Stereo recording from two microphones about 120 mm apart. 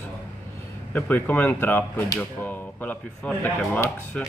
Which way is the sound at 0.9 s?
15° left (ahead or behind).